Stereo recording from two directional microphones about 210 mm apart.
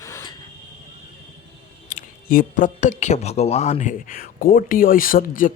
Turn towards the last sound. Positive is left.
turn(degrees=40)  # may be behind; listen again after turning